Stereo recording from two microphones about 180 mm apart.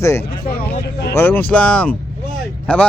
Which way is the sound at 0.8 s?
65° left (ahead or behind).